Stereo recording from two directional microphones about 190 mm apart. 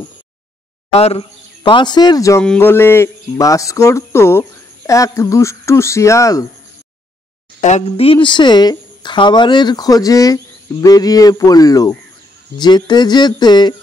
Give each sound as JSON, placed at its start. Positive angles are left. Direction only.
{"t": 0.9, "sound": "speech", "side_deg": 30}
{"t": 7.6, "sound": "a woman's voice", "side_deg": 35}